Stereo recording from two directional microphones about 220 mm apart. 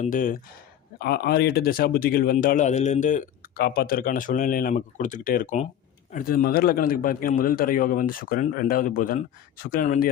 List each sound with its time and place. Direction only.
0.0 s speech: 35° left (ahead or behind)